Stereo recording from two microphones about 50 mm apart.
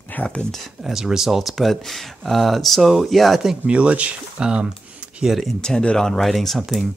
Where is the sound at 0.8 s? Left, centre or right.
Centre.